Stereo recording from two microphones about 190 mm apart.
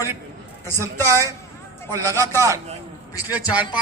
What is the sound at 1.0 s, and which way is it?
Speech, 15° right (ahead or behind).